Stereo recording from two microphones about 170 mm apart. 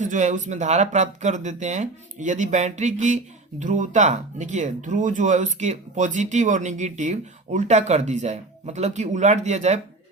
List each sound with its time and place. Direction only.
0.0 s speech: 45° right (ahead or behind)